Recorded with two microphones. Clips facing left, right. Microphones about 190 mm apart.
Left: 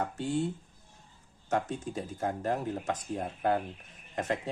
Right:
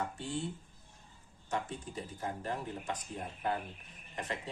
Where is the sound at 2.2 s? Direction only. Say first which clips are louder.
Left 7 dB; 50° left (ahead or behind).